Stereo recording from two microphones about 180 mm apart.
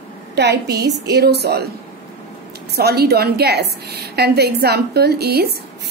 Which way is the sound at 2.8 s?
65° right (ahead or behind).